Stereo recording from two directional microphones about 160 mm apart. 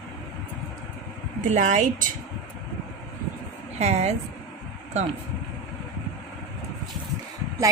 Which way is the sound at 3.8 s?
45° right (ahead or behind).